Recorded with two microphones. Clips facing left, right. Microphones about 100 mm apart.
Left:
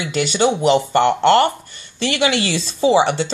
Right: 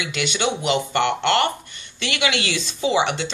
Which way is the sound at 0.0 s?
35° left (ahead or behind).